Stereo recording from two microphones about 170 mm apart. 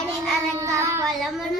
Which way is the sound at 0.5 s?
20° right (ahead or behind).